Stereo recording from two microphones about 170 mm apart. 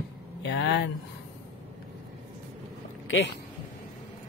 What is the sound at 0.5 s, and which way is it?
Speech, 90° left.